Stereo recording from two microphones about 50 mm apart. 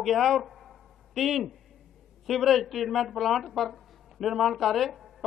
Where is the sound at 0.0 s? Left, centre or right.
Centre.